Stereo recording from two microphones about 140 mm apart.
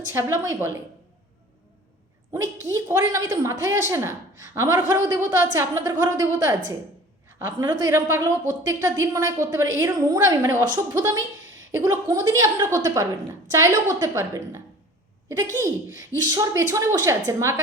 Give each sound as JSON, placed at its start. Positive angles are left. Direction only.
{"t": 0.1, "sound": "a woman's voice", "side_deg": -20}
{"t": 2.3, "sound": "a woman's voice", "side_deg": -25}
{"t": 7.3, "sound": "a sound", "side_deg": -15}
{"t": 7.6, "sound": "a woman's voice", "side_deg": -25}
{"t": 15.6, "sound": "a woman's voice", "side_deg": -25}